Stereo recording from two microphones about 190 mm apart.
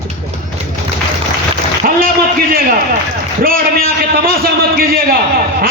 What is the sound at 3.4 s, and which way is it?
A man's voice, 50° right (ahead or behind).